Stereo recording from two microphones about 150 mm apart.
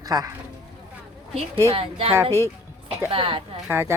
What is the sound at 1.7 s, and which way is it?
Speech, 40° right (ahead or behind).